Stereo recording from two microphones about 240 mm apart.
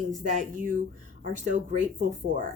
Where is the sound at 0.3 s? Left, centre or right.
Right.